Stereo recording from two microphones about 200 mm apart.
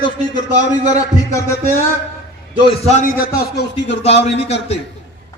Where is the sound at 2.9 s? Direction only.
40° left (ahead or behind).